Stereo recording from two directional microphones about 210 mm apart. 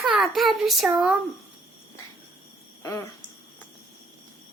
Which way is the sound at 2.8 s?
15° left (ahead or behind).